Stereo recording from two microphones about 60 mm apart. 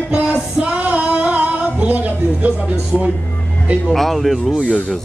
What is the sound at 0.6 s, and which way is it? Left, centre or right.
Female singing, centre.